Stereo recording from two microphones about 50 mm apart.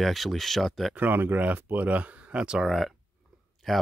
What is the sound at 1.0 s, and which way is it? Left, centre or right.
Speech, right.